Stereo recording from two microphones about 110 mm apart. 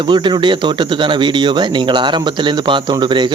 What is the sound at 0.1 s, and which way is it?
Speech, 45° right (ahead or behind).